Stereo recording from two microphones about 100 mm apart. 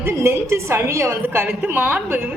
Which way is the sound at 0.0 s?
25° right (ahead or behind).